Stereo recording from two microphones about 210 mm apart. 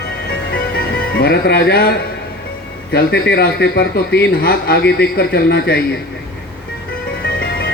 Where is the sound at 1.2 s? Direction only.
50° left (ahead or behind).